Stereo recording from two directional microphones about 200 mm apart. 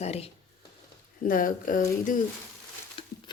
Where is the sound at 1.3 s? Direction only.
45° left (ahead or behind).